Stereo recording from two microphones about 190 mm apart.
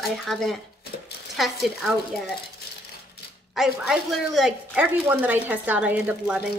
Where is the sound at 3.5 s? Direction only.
Centre (ahead or behind).